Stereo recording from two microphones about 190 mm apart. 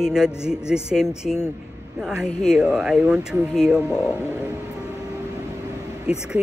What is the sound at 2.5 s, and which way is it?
Speech, 5° right (ahead or behind).